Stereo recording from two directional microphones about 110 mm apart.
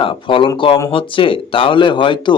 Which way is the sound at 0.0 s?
50° left (ahead or behind).